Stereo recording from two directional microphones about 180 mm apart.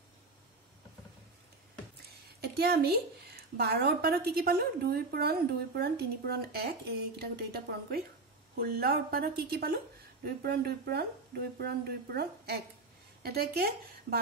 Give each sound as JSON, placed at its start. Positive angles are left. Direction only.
{"t": 2.4, "sound": "a woman's voice", "side_deg": -60}